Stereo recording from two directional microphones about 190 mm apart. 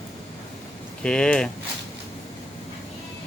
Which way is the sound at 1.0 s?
5° left (ahead or behind).